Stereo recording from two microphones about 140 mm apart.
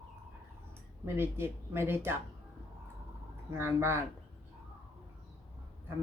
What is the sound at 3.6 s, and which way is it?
Speech, 15° right (ahead or behind).